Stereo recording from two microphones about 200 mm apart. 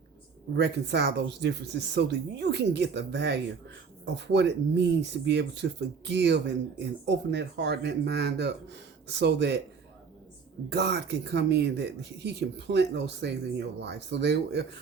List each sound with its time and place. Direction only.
0.5 s speech: 55° right (ahead or behind)
10.7 s speech: 55° right (ahead or behind)